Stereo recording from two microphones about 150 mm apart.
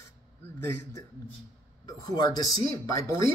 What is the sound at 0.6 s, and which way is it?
Speech, 15° left (ahead or behind).